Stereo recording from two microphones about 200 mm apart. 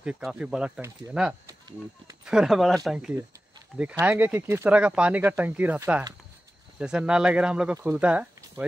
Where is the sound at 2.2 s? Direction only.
5° right (ahead or behind).